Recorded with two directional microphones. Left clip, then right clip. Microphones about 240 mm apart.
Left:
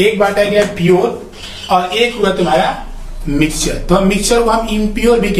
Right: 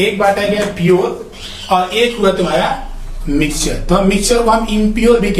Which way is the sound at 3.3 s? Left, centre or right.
Centre.